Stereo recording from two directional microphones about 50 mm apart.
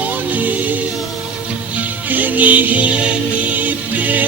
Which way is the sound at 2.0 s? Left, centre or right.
Right.